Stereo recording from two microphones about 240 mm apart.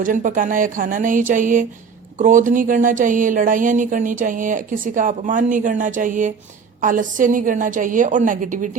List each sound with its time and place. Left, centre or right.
0.0 s speech: right